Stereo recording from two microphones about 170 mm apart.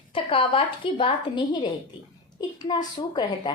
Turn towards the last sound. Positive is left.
turn(degrees=25)  # may be behind; listen again after turning